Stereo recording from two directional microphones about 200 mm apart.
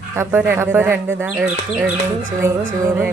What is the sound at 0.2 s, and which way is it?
Speech, 10° right (ahead or behind).